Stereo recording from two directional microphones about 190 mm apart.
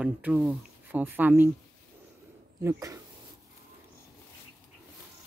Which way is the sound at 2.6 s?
15° right (ahead or behind).